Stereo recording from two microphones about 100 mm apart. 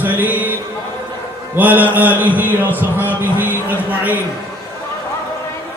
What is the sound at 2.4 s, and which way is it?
Speech, 20° right (ahead or behind).